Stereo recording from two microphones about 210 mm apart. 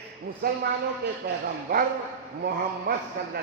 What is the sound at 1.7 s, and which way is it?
Speech, 45° right (ahead or behind).